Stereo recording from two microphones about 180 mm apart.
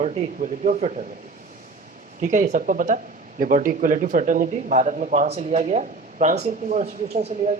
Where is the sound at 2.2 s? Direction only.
40° right (ahead or behind).